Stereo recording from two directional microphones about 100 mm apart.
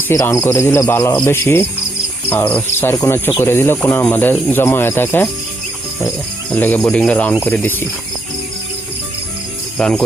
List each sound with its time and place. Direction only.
0.1 s speech: 25° left (ahead or behind)
2.9 s speech: 30° left (ahead or behind)
6.5 s speech: 15° left (ahead or behind)
9.7 s speech: 10° left (ahead or behind)